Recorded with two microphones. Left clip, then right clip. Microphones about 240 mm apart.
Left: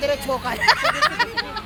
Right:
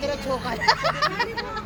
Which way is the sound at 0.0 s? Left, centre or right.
Left.